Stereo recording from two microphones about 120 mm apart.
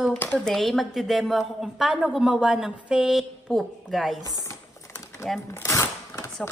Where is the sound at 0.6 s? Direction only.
Centre (ahead or behind).